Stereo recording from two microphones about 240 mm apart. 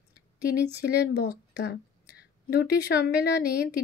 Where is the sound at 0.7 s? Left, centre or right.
Left.